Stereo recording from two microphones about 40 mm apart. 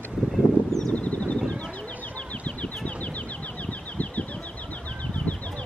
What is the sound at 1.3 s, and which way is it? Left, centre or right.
Bird, left.